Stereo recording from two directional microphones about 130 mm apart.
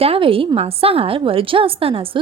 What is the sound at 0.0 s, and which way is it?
A woman's voice, 45° right (ahead or behind).